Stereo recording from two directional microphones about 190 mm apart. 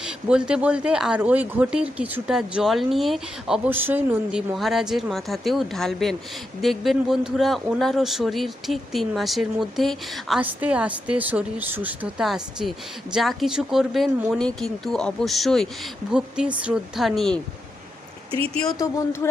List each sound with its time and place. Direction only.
0.0 s speech: 5° right (ahead or behind)
18.8 s speech: 15° left (ahead or behind)